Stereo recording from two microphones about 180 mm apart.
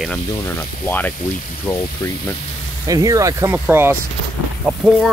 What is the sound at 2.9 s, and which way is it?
Speech, 20° right (ahead or behind).